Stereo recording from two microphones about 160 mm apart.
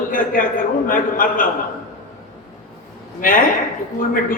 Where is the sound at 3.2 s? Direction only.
60° left (ahead or behind).